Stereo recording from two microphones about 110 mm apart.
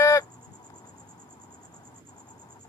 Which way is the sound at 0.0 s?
25° left (ahead or behind).